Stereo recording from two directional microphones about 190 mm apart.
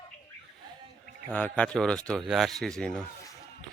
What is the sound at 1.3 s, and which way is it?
A man's voice, 5° left (ahead or behind).